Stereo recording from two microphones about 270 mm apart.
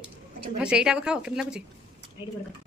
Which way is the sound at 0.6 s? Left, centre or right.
Centre.